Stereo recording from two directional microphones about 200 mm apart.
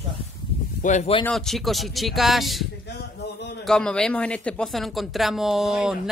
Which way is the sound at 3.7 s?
5° left (ahead or behind).